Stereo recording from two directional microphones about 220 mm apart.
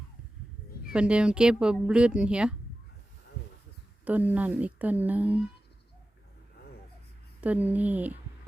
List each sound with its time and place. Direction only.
0.9 s speech: 5° right (ahead or behind)
4.0 s speech: 5° right (ahead or behind)
7.4 s speech: 5° right (ahead or behind)